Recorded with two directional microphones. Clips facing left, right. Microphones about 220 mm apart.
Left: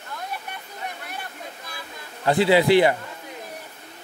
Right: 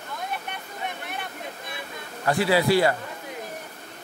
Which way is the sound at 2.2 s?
25° left (ahead or behind).